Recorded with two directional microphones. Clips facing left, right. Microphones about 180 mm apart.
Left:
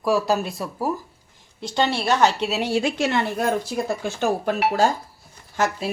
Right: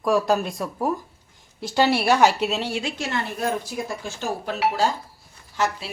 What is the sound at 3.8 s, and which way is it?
Speech, 60° left (ahead or behind).